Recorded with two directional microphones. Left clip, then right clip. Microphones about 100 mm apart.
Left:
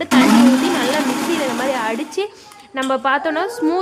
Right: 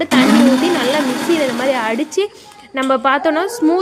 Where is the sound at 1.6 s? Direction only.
20° right (ahead or behind).